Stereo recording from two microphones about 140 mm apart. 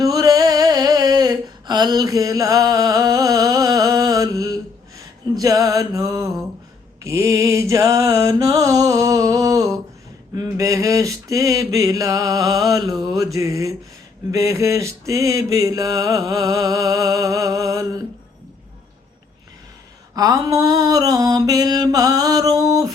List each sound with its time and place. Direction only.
0.0 s a sound: 25° right (ahead or behind)
4.9 s mantra: 25° right (ahead or behind)
20.1 s mantra: 25° right (ahead or behind)